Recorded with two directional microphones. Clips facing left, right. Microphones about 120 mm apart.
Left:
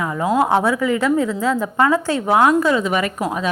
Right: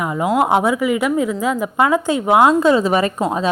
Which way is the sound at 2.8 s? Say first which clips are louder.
Right 3 dB; 35° right (ahead or behind).